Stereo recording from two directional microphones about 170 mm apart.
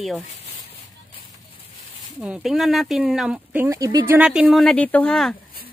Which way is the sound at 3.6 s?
20° right (ahead or behind).